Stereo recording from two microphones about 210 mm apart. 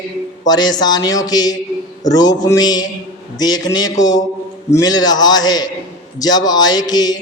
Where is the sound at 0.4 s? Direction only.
20° left (ahead or behind).